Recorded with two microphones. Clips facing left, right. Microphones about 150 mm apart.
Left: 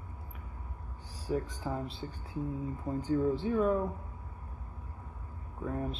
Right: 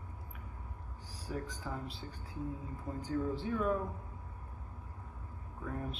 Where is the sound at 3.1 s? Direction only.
25° left (ahead or behind).